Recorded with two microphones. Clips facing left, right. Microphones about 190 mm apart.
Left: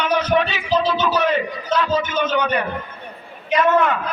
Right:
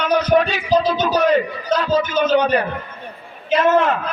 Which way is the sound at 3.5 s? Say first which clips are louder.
Right 2 dB; 30° right (ahead or behind).